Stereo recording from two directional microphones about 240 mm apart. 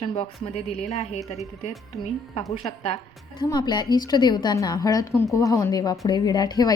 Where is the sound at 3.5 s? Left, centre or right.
Centre.